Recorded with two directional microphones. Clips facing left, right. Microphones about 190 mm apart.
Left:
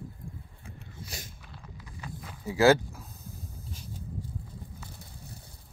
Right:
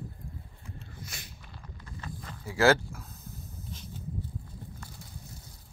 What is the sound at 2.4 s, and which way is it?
Speech, 15° left (ahead or behind).